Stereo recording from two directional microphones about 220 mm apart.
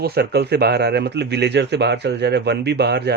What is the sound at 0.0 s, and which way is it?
Speech, 45° right (ahead or behind).